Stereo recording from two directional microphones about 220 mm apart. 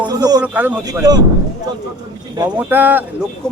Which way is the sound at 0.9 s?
15° right (ahead or behind).